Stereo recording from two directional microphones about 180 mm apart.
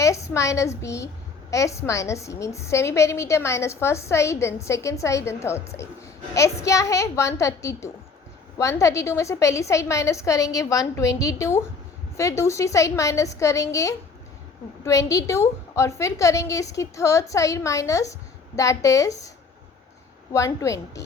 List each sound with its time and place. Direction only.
0.0 s a woman's voice: 15° left (ahead or behind)
20.3 s a woman's voice: 15° left (ahead or behind)